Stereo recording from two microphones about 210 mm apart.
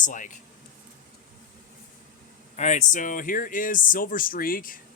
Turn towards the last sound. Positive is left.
turn(degrees=40)  # may be behind; listen again after turning